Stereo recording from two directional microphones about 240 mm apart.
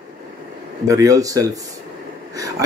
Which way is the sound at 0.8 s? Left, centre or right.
Centre.